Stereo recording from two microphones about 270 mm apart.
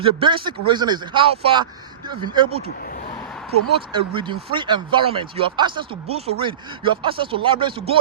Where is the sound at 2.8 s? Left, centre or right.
Left.